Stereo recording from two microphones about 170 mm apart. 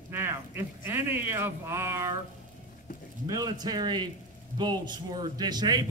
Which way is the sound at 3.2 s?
20° right (ahead or behind).